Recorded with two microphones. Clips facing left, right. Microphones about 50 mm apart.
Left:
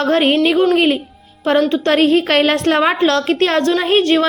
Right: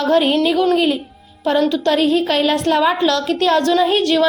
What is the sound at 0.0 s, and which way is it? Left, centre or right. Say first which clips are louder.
A woman's voice: left 1 dB; left.